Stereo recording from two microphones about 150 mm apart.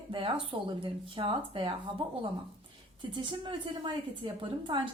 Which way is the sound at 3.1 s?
30° right (ahead or behind).